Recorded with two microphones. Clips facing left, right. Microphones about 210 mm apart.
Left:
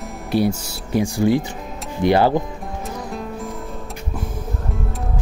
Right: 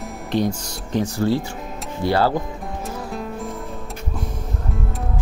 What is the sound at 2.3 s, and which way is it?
Music, centre (ahead or behind).